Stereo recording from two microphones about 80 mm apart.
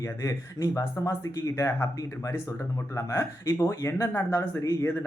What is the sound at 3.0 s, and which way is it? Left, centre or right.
A man's voice, left.